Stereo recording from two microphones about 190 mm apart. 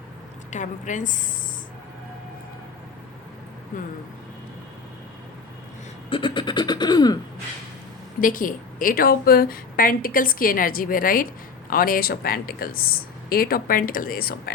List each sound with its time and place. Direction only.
0.5 s a woman's voice: 40° left (ahead or behind)
3.7 s a woman's voice: 45° left (ahead or behind)
6.1 s a sound: 25° left (ahead or behind)
8.2 s a woman's voice: 45° left (ahead or behind)